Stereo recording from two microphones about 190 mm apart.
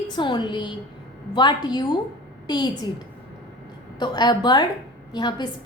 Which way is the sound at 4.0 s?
20° left (ahead or behind).